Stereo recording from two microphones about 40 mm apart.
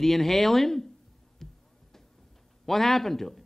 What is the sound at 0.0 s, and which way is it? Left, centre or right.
Speech, centre.